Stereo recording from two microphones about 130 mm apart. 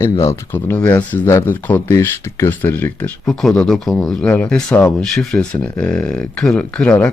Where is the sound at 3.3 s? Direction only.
Centre (ahead or behind).